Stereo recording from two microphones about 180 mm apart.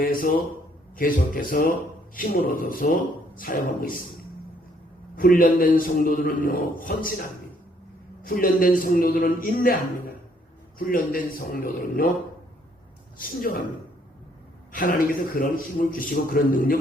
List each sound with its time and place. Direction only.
0.0 s a man's voice: 50° left (ahead or behind)
5.1 s a man's voice: 50° left (ahead or behind)
8.2 s a man's voice: 55° left (ahead or behind)
10.8 s a man's voice: 50° left (ahead or behind)
13.1 s a man's voice: 50° left (ahead or behind)
14.7 s a man's voice: 50° left (ahead or behind)